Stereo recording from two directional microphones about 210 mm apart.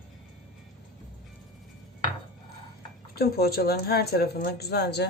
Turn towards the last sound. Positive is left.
turn(degrees=50)  # may be behind; listen again after turning